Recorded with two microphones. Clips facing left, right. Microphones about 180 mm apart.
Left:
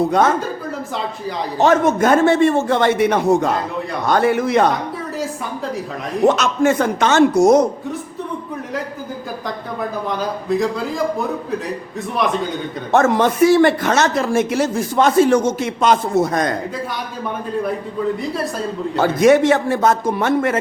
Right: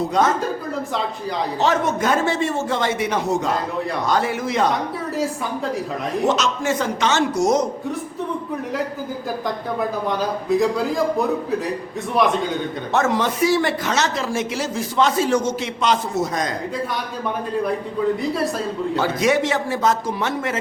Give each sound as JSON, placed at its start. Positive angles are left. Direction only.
{"t": 0.0, "sound": "a man's voice", "side_deg": 55}
{"t": 1.5, "sound": "a man's voice", "side_deg": 50}
{"t": 5.1, "sound": "a woman's voice", "side_deg": 0}
{"t": 6.2, "sound": "a man's voice", "side_deg": 55}
{"t": 10.5, "sound": "a woman's voice", "side_deg": 0}
{"t": 12.2, "sound": "a woman's voice", "side_deg": 0}
{"t": 12.9, "sound": "a man's voice", "side_deg": 50}
{"t": 18.9, "sound": "a man's voice", "side_deg": 50}